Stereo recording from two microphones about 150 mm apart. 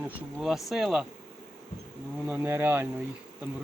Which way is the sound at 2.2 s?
10° right (ahead or behind).